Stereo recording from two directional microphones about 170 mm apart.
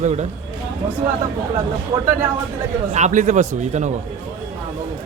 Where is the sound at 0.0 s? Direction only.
45° right (ahead or behind).